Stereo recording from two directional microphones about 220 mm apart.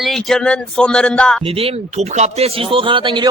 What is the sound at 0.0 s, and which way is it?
Speech, centre (ahead or behind).